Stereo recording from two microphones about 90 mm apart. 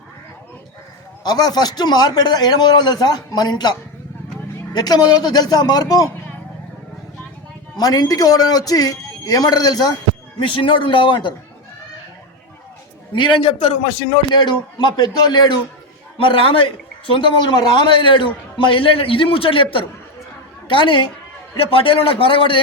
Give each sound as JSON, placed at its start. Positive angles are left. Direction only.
{"t": 1.2, "sound": "a man's voice", "side_deg": 50}
{"t": 7.8, "sound": "a man's voice", "side_deg": 45}
{"t": 10.4, "sound": "a man's voice", "side_deg": 70}
{"t": 13.1, "sound": "a man's voice", "side_deg": 65}
{"t": 14.3, "sound": "a man's voice", "side_deg": 60}
{"t": 16.1, "sound": "a man's voice", "side_deg": 85}
{"t": 20.7, "sound": "a man's voice", "side_deg": 70}
{"t": 21.6, "sound": "a man's voice", "side_deg": 90}